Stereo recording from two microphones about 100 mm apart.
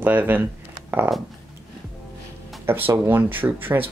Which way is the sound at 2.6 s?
20° right (ahead or behind).